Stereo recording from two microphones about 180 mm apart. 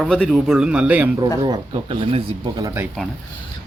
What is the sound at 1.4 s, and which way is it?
Speech, 25° right (ahead or behind).